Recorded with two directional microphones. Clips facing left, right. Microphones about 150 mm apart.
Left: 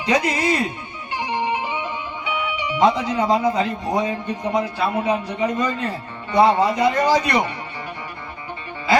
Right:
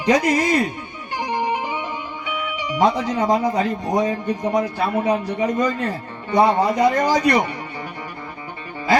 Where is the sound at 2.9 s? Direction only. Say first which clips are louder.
Even; 45° right (ahead or behind).